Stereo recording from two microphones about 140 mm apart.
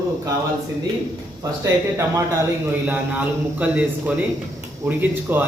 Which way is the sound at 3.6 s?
10° right (ahead or behind).